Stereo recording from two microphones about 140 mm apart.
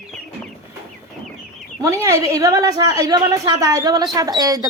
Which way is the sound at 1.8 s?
25° right (ahead or behind).